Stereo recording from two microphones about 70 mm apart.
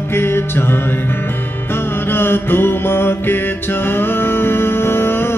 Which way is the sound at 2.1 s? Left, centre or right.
Left.